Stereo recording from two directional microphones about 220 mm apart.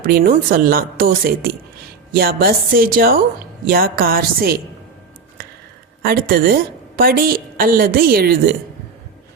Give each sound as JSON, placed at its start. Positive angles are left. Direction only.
{"t": 0.0, "sound": "a woman's voice", "side_deg": -40}
{"t": 6.0, "sound": "a woman's voice", "side_deg": -45}